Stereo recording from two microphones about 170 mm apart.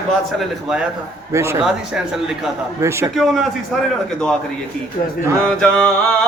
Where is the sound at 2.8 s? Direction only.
15° right (ahead or behind).